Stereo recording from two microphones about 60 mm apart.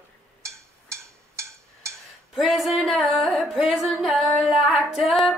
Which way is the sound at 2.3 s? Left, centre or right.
Centre.